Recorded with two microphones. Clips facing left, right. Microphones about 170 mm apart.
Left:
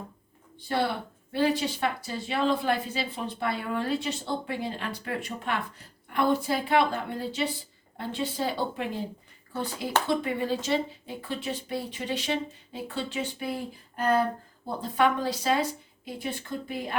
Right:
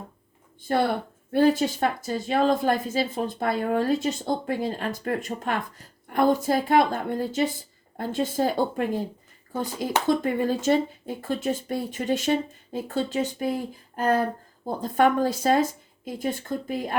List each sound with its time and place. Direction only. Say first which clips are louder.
0.7 s a woman's voice: right 4 dB; 50° right (ahead or behind)
13.9 s a sound: right 2 dB; 45° right (ahead or behind)
14.8 s a woman's voice: right 4 dB; 45° right (ahead or behind)